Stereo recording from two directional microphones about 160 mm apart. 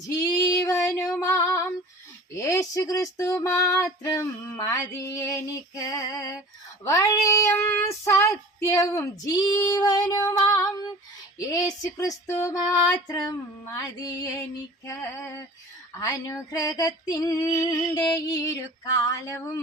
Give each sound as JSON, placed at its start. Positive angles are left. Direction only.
{"t": 0.2, "sound": "female singing", "side_deg": 20}
{"t": 6.8, "sound": "child singing", "side_deg": 20}
{"t": 14.8, "sound": "female singing", "side_deg": 15}
{"t": 16.0, "sound": "child singing", "side_deg": 20}